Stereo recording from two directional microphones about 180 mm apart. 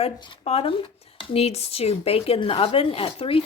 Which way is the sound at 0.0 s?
30° left (ahead or behind).